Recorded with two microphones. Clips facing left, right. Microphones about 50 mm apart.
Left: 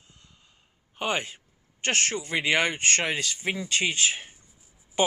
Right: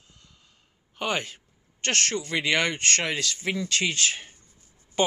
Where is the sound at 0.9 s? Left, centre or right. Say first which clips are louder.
Even; centre.